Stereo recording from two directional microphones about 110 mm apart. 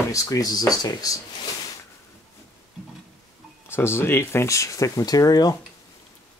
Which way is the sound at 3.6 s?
20° left (ahead or behind).